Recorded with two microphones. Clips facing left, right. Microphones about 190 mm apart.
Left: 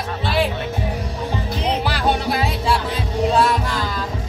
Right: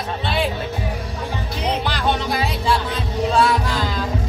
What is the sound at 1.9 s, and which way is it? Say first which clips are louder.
Music: left 1 dB; 5° left (ahead or behind).